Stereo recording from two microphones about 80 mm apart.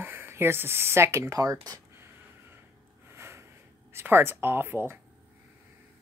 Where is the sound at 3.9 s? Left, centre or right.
Right.